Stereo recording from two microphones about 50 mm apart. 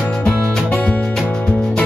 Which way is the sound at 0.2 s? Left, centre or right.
Centre.